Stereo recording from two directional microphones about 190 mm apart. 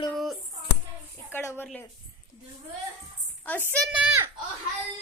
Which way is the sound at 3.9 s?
5° right (ahead or behind).